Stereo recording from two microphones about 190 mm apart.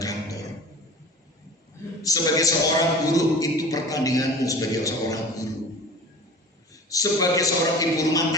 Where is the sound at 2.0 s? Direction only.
20° left (ahead or behind).